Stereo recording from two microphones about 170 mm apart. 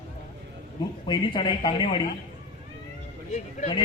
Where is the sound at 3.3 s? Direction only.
40° left (ahead or behind).